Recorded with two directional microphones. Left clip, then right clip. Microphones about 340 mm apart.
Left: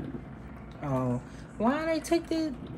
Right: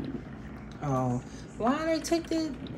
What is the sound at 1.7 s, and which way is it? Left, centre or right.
Speech, left.